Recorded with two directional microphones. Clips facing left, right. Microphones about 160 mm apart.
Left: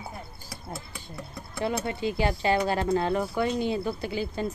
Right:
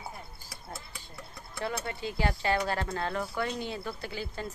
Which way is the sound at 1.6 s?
20° left (ahead or behind).